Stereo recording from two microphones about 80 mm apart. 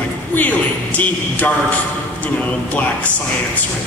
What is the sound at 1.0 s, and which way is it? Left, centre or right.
Speech, left.